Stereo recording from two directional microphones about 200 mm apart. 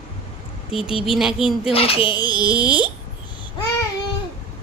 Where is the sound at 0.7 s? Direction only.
Centre (ahead or behind).